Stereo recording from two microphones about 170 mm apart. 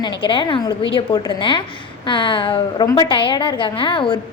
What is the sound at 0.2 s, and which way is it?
A woman's voice, 30° left (ahead or behind).